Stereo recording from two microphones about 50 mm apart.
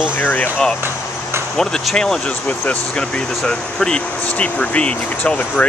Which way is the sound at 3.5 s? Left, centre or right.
Centre.